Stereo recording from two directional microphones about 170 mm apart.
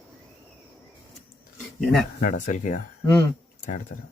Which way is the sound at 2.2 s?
50° left (ahead or behind).